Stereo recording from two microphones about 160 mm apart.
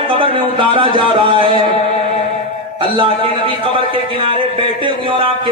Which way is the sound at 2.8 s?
30° right (ahead or behind).